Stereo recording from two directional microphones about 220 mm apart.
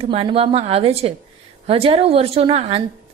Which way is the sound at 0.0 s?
25° right (ahead or behind).